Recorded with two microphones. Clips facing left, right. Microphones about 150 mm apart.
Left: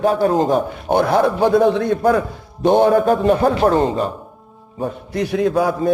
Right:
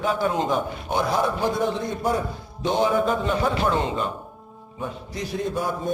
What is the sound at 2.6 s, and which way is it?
A man's voice, 60° left (ahead or behind).